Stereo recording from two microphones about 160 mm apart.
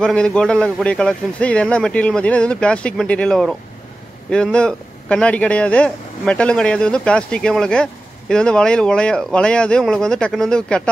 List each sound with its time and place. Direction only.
0.0 s a man's voice: 5° left (ahead or behind)